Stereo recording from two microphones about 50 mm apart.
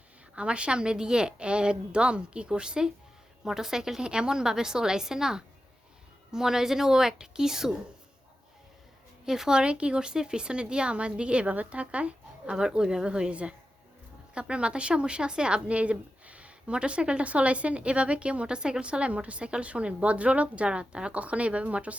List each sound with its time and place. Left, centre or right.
0.3 s a woman's voice: right
9.2 s a woman's voice: centre
9.6 s speech: right
12.6 s a woman's voice: centre